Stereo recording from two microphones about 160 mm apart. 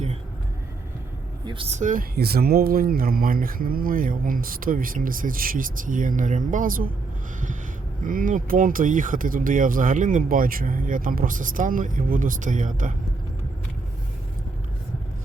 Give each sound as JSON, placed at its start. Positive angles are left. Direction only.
{"t": 1.7, "sound": "speech", "side_deg": -55}
{"t": 8.0, "sound": "speech", "side_deg": -55}